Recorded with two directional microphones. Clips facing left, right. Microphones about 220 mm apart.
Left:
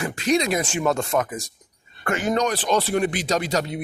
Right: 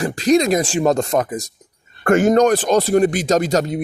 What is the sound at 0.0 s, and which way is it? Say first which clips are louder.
Speech: right 6 dB; 35° right (ahead or behind).